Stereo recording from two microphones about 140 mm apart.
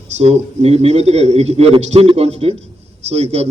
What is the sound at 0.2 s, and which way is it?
A man's voice, 50° right (ahead or behind).